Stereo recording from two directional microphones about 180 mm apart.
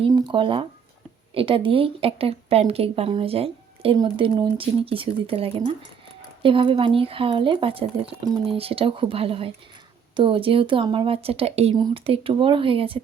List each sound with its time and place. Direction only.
0.1 s a woman's voice: 25° right (ahead or behind)